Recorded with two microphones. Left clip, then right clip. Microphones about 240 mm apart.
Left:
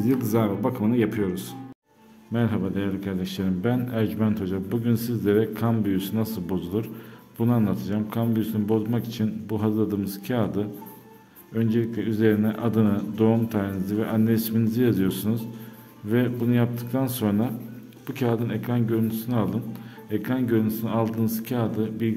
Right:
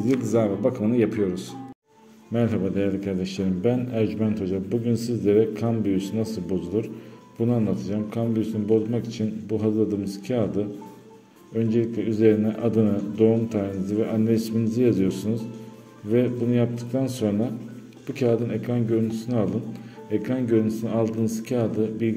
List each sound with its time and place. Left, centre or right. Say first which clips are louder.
0.0 s a man's voice: right 2 dB; centre